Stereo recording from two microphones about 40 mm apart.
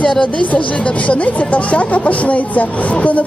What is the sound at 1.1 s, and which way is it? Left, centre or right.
A woman's voice, left.